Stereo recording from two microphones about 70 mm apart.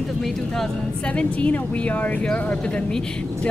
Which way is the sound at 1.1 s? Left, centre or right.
Centre.